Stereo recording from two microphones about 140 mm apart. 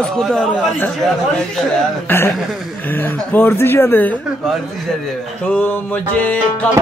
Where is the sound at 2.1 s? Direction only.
15° left (ahead or behind).